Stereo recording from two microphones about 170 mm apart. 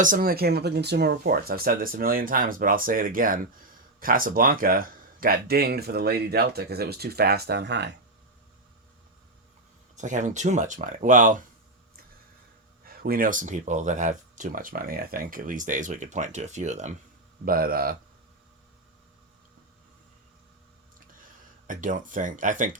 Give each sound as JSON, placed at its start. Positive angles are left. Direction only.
{"t": 0.0, "sound": "speech", "side_deg": -55}
{"t": 1.3, "sound": "speech", "side_deg": -60}
{"t": 9.9, "sound": "speech", "side_deg": -45}
{"t": 12.8, "sound": "speech", "side_deg": -60}
{"t": 17.4, "sound": "speech", "side_deg": -60}
{"t": 21.7, "sound": "speech", "side_deg": -50}